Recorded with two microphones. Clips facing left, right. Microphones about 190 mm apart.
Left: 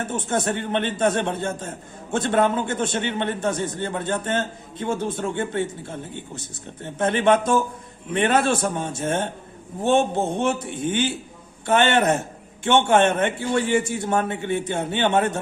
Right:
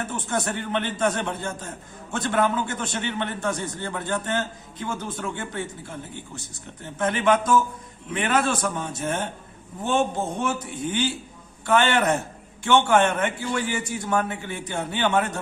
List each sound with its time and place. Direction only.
0.0 s a man's voice: 25° left (ahead or behind)
11.6 s a man's voice: 25° left (ahead or behind)